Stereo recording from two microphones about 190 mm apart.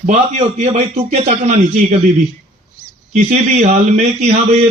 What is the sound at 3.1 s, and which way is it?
A man's voice, 40° right (ahead or behind).